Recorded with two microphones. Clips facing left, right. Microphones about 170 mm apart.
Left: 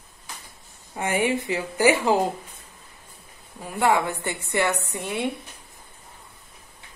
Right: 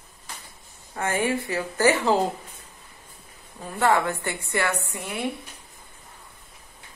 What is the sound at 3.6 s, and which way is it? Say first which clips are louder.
A woman's voice: even; 10° left (ahead or behind).